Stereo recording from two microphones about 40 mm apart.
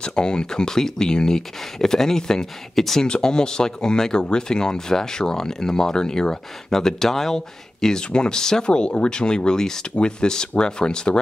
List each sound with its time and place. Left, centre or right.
0.0 s speech: left
3.1 s speech: centre